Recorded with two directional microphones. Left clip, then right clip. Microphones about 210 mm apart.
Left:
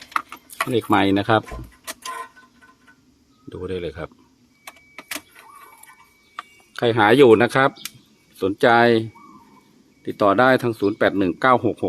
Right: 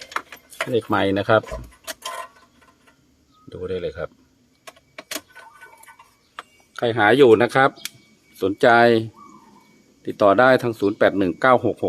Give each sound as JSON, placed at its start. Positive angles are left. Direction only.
{"t": 0.7, "sound": "speech", "side_deg": 10}
{"t": 3.5, "sound": "speech", "side_deg": 10}
{"t": 6.7, "sound": "speech", "side_deg": 20}
{"t": 8.4, "sound": "speech", "side_deg": 0}